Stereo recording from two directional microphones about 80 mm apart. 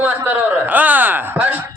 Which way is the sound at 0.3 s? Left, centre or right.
Right.